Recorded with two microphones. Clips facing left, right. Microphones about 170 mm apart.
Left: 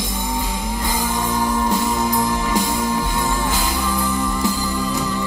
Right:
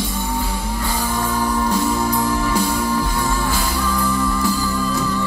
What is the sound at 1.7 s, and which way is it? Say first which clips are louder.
Music: right 1 dB; 15° left (ahead or behind).